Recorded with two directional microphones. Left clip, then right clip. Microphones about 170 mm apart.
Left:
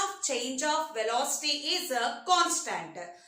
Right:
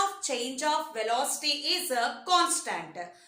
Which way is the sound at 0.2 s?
30° right (ahead or behind).